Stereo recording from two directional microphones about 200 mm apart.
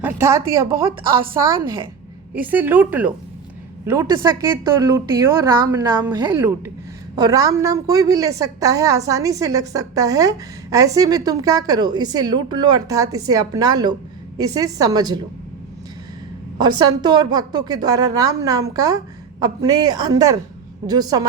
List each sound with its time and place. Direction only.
0.0 s a woman's voice: 15° right (ahead or behind)
0.9 s a woman's voice: 25° right (ahead or behind)
2.3 s a woman's voice: 10° right (ahead or behind)
16.6 s a woman's voice: 20° right (ahead or behind)